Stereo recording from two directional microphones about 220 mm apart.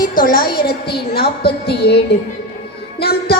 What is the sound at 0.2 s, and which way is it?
A woman's voice, 40° left (ahead or behind).